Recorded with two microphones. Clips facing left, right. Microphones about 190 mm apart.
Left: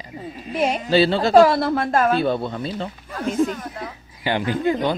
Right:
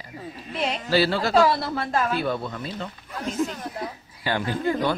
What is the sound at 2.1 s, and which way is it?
Speech, 25° left (ahead or behind).